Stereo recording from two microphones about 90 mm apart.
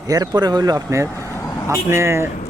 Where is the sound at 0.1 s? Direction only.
50° right (ahead or behind).